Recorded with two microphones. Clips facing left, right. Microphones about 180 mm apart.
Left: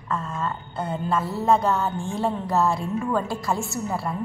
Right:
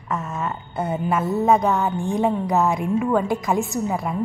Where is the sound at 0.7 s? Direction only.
20° right (ahead or behind).